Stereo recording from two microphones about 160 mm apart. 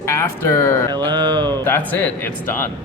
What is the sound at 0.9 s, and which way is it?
Speech, 30° right (ahead or behind).